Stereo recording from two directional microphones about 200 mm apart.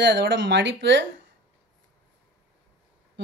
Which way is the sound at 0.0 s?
60° right (ahead or behind).